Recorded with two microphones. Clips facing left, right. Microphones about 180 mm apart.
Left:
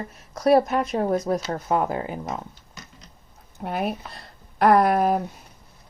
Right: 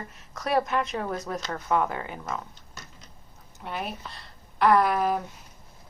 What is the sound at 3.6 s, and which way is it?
Speech, 50° left (ahead or behind).